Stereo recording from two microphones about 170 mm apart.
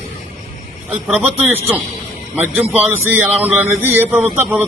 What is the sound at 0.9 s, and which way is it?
A man's voice, 5° right (ahead or behind).